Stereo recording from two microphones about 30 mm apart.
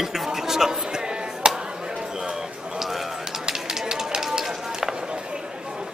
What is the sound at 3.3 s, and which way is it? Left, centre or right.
Spray, right.